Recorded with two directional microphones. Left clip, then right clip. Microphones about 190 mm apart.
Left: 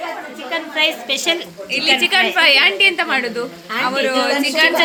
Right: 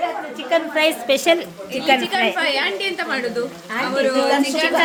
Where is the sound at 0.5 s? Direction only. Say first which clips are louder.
Right 1 dB; 45° right (ahead or behind).